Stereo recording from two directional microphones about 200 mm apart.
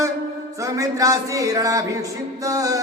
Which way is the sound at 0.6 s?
15° right (ahead or behind).